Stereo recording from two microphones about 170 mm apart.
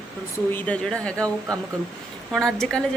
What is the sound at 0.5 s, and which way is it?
Speech, 5° left (ahead or behind).